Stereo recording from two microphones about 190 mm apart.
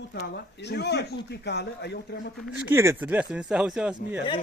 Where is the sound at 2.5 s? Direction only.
15° right (ahead or behind).